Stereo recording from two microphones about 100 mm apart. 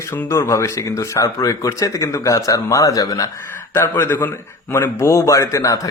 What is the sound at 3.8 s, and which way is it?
A man's voice, 25° left (ahead or behind).